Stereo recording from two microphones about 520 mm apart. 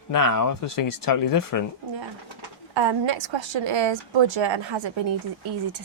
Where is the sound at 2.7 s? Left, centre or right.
Right.